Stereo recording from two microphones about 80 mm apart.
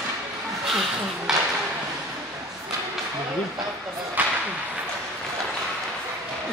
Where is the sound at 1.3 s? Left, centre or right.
Centre.